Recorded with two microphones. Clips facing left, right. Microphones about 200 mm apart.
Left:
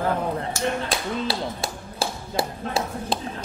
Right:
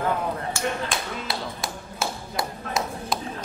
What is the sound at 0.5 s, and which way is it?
Tap, 35° left (ahead or behind).